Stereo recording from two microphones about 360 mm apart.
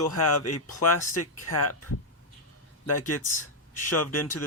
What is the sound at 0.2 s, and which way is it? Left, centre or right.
Speech, left.